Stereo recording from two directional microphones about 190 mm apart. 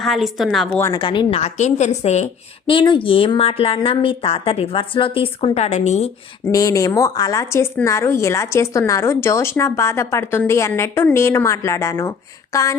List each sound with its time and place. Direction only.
0.0 s a woman's voice: centre (ahead or behind)
0.9 s a woman's voice: 25° left (ahead or behind)
6.5 s a woman's voice: 15° left (ahead or behind)